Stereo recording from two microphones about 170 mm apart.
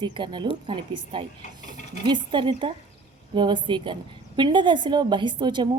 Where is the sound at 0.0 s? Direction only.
25° right (ahead or behind).